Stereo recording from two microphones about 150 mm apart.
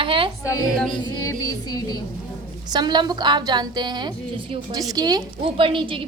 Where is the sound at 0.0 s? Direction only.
35° right (ahead or behind).